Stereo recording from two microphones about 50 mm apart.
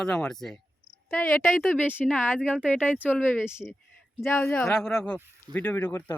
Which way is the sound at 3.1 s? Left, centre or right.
Left.